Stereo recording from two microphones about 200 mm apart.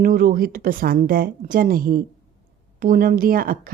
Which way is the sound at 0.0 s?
45° right (ahead or behind).